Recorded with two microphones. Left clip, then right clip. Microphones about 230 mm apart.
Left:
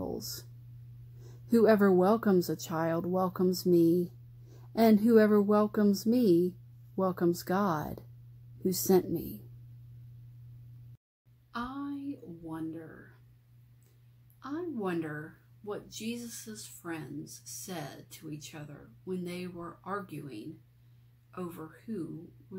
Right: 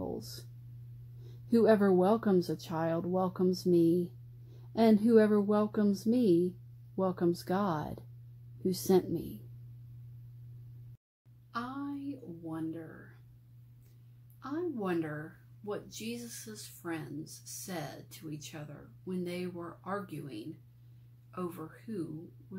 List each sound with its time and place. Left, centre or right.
0.0 s whispering: left
1.2 s a woman's voice: left
11.5 s a woman's voice: centre
14.4 s speech: centre
21.4 s speech: centre